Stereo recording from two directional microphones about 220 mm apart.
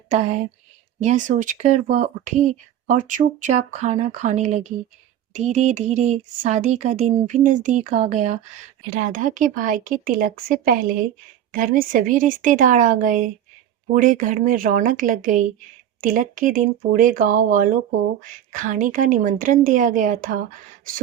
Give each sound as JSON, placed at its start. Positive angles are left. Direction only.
{"t": 0.1, "sound": "speech", "side_deg": -35}